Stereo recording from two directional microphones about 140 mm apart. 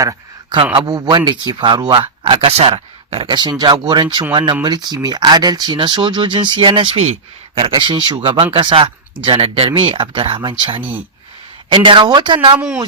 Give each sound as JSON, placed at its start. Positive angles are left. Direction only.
{"t": 0.0, "sound": "speech", "side_deg": -25}
{"t": 7.6, "sound": "speech", "side_deg": -40}
{"t": 10.8, "sound": "speech", "side_deg": -15}
{"t": 11.7, "sound": "speech", "side_deg": -35}
{"t": 12.5, "sound": "speech", "side_deg": -5}